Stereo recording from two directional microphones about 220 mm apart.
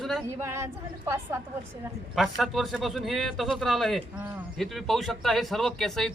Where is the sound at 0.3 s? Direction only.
10° right (ahead or behind).